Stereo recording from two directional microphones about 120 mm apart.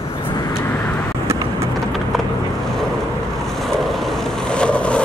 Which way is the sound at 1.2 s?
25° right (ahead or behind).